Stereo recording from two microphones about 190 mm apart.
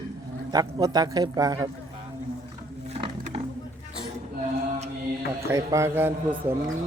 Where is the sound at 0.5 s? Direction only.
20° right (ahead or behind).